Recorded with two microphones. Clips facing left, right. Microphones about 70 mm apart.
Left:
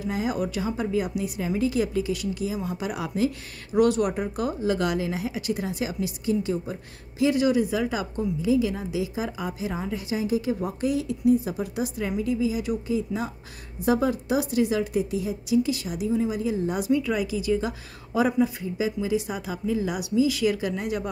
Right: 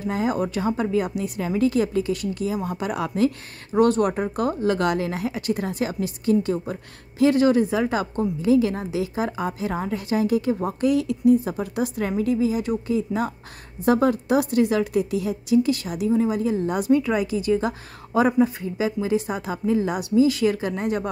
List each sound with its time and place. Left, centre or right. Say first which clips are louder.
0.0 s a woman's voice: right 3 dB; right
10.5 s speech: right 4 dB; right
10.9 s a woman's voice: right 4 dB; right